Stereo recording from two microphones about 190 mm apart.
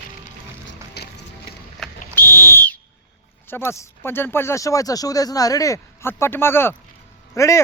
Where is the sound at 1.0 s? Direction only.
60° left (ahead or behind).